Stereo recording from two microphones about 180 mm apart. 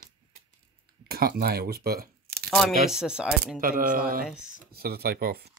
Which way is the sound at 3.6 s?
50° right (ahead or behind).